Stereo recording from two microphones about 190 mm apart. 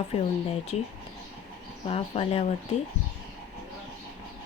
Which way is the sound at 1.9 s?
30° left (ahead or behind).